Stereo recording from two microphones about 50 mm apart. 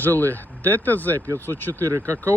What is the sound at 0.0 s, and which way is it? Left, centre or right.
Speech, left.